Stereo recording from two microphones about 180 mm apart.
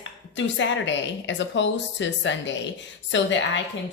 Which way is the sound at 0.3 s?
90° left.